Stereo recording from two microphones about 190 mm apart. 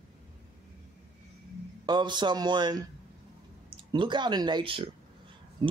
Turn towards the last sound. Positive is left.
turn(degrees=-25)  # may be behind; listen again after turning